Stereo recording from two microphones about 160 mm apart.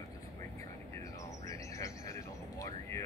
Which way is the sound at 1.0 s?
20° left (ahead or behind).